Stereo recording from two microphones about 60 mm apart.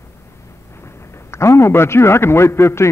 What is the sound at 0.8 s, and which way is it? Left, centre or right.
A man's voice, left.